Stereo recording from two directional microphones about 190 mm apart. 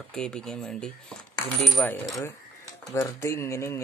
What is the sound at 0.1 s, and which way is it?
Speech, 5° left (ahead or behind).